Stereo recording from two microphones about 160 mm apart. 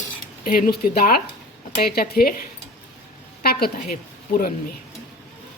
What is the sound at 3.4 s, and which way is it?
A woman's voice, 75° left (ahead or behind).